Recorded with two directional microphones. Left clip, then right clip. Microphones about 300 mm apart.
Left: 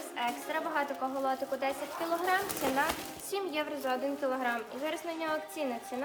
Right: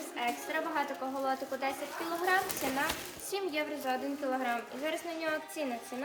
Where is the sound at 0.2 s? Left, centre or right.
Centre.